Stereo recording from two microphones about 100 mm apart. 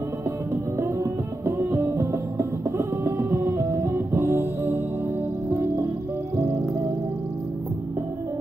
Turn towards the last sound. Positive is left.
turn(degrees=-30)  # may be behind; listen again after turning